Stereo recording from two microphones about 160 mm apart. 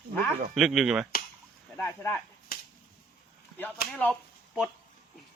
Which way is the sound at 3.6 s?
10° left (ahead or behind).